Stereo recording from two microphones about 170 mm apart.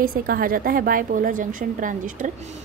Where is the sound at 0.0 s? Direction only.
60° right (ahead or behind).